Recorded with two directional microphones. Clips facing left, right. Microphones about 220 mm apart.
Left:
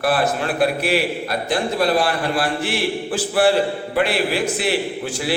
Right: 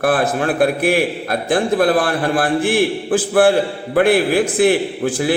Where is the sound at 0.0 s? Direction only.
50° right (ahead or behind).